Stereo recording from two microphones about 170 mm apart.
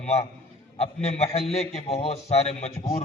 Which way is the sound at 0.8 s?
40° left (ahead or behind).